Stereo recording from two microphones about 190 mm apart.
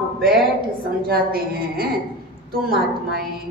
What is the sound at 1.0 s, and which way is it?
Speech, 50° right (ahead or behind).